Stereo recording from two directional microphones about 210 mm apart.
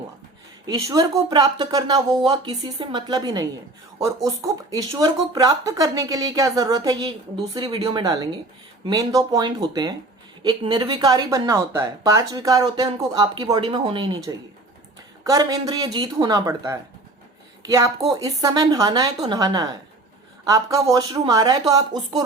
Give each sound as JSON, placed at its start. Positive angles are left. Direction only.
{"t": 0.7, "sound": "speech", "side_deg": -15}